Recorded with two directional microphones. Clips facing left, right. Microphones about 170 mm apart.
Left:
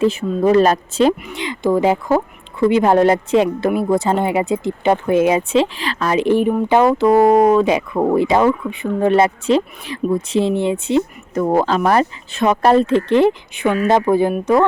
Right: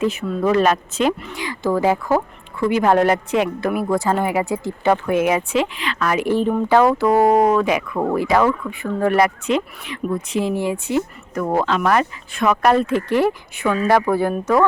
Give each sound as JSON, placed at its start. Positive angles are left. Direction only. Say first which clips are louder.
{"t": 0.0, "sound": "speech", "louder": "left 4 dB", "side_deg": 30}
{"t": 1.2, "sound": "speech", "louder": "left 3 dB", "side_deg": 20}